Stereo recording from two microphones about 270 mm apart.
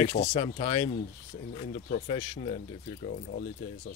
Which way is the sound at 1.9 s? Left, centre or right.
Left.